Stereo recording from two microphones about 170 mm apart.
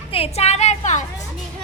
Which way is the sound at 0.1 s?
35° left (ahead or behind).